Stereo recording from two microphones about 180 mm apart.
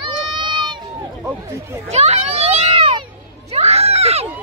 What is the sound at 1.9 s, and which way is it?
Children playing, 35° right (ahead or behind).